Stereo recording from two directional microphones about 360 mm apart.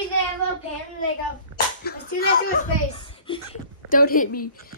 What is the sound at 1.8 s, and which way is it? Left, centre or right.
Speech, left.